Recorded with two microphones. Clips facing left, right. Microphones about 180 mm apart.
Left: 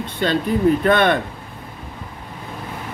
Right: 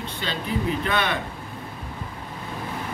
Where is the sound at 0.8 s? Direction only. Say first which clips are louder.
Left 9 dB; 55° left (ahead or behind).